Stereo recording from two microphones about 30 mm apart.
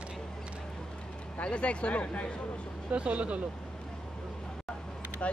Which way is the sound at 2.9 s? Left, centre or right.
Right.